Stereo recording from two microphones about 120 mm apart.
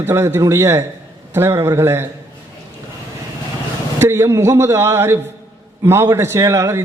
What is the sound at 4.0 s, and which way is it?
A man's voice, 20° right (ahead or behind).